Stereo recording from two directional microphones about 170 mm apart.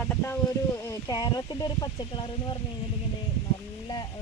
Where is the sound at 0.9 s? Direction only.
20° left (ahead or behind).